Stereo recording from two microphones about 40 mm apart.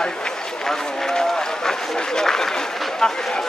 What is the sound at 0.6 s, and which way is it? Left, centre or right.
A man's voice, centre.